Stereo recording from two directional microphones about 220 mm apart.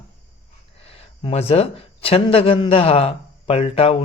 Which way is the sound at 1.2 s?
30° left (ahead or behind).